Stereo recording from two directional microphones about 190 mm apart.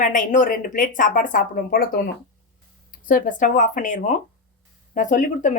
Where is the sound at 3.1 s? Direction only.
45° left (ahead or behind).